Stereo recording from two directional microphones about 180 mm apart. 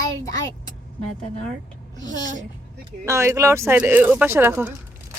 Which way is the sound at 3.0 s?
15° right (ahead or behind).